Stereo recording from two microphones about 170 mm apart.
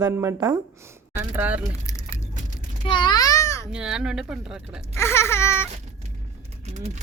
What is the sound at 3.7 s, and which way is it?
Speech, 5° right (ahead or behind).